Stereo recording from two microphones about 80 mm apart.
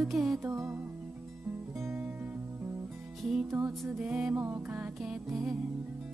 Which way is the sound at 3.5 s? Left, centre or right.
Right.